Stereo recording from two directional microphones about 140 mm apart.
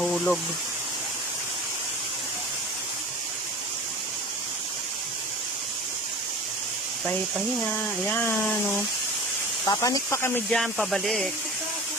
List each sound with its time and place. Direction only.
0.0 s speech: centre (ahead or behind)
7.8 s speech: 15° left (ahead or behind)
9.6 s speech: 25° left (ahead or behind)
10.5 s speech: centre (ahead or behind)